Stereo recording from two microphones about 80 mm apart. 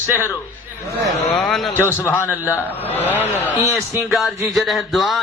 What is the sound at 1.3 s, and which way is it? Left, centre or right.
Speech, centre.